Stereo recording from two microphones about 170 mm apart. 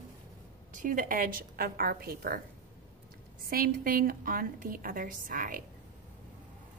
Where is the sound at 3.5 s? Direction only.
55° right (ahead or behind).